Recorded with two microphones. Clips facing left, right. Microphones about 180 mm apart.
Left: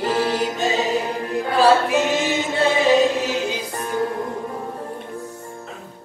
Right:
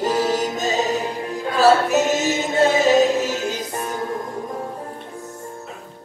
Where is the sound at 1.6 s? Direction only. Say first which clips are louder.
Right 1 dB; 45° right (ahead or behind).